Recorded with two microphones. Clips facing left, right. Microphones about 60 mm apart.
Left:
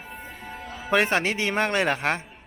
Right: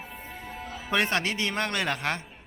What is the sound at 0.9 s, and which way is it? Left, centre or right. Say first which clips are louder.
A man's voice: left 4 dB; centre.